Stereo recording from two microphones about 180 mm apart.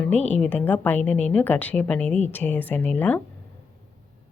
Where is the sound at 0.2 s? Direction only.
40° left (ahead or behind).